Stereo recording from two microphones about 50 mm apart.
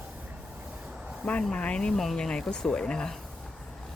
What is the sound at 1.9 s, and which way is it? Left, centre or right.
Speech, centre.